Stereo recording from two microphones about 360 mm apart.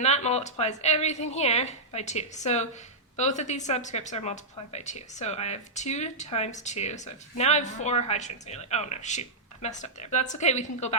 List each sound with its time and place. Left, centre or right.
0.0 s a woman's voice: centre